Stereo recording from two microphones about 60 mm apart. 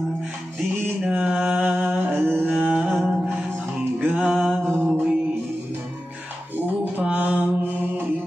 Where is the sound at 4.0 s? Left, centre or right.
Right.